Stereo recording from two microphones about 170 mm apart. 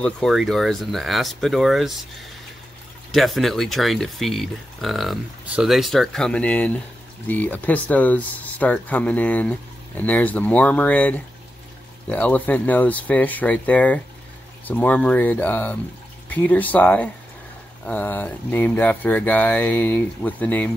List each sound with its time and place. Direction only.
0.0 s speech: centre (ahead or behind)
3.1 s speech: centre (ahead or behind)